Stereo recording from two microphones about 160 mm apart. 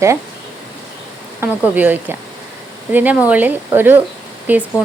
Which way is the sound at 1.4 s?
10° right (ahead or behind).